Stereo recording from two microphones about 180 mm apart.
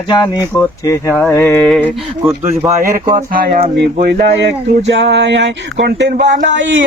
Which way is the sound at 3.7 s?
65° right (ahead or behind).